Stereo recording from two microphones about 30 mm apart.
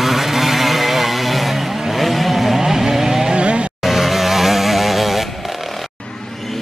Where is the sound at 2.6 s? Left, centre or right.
Centre.